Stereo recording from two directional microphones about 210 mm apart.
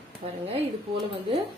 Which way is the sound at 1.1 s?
30° right (ahead or behind).